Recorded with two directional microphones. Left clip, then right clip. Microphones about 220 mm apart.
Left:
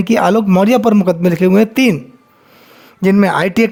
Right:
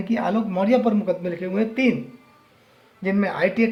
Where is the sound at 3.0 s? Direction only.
50° left (ahead or behind).